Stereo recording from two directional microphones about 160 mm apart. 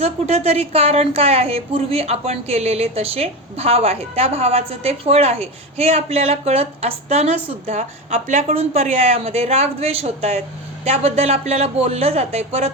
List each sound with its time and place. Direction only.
0.0 s a woman's voice: 40° right (ahead or behind)